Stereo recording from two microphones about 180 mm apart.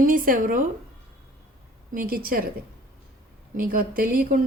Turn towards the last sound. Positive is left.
turn(degrees=-55)  # may be behind; listen again after turning